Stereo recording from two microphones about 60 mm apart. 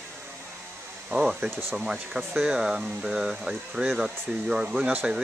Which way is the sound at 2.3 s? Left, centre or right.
Centre.